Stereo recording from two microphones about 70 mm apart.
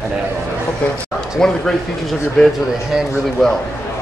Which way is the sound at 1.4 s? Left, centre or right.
Centre.